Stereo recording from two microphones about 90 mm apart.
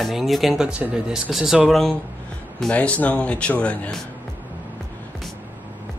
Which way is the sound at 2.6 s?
15° left (ahead or behind).